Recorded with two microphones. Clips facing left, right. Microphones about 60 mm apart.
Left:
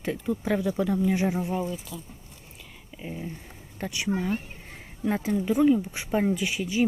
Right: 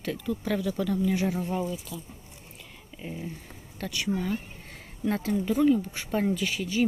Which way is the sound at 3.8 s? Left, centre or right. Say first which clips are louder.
Left 1 dB; centre.